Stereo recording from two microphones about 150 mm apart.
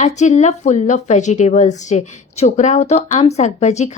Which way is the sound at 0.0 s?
50° left (ahead or behind).